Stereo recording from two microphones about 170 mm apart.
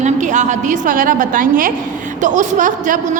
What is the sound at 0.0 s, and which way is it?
A woman's voice, 45° right (ahead or behind).